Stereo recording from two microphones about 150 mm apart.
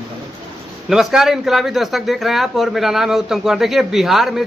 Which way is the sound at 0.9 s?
5° right (ahead or behind).